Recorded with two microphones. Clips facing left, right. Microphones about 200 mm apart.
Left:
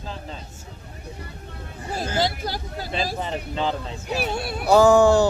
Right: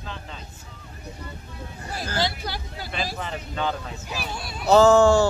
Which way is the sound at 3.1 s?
30° left (ahead or behind).